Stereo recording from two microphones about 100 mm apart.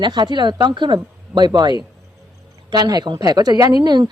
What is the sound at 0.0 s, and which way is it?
A woman's voice, 50° right (ahead or behind).